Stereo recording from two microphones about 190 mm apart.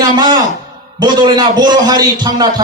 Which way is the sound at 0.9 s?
20° right (ahead or behind).